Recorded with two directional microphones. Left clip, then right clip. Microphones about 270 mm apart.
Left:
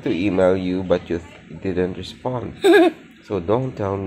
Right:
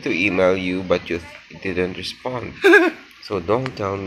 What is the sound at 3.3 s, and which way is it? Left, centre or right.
Speech, centre.